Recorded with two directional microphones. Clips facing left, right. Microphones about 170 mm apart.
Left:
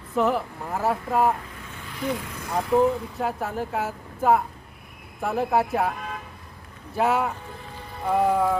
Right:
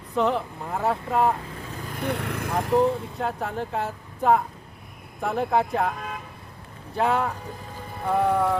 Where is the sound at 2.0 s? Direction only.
60° right (ahead or behind).